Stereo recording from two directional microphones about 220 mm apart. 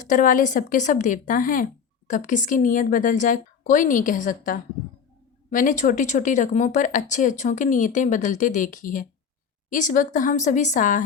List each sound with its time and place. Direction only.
0.0 s speech: 35° left (ahead or behind)